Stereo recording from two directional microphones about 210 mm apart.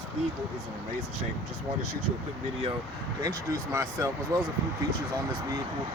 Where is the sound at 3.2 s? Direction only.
15° right (ahead or behind).